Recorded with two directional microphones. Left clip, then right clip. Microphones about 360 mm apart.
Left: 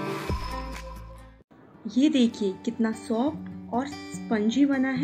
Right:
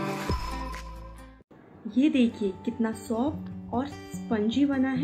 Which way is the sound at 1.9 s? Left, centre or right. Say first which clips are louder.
Left 1 dB; centre.